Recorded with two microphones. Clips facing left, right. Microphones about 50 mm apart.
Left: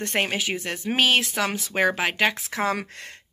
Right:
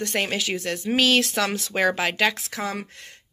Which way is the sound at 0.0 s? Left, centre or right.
Left.